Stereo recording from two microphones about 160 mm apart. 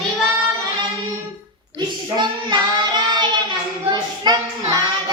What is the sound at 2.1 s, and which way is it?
Child singing, 30° right (ahead or behind).